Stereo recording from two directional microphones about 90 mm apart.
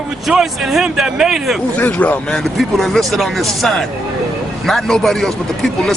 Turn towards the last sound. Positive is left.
turn(degrees=5)  # may be behind; listen again after turning